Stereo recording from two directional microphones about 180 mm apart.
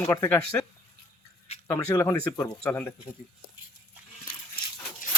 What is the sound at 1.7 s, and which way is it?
Speech, 15° left (ahead or behind).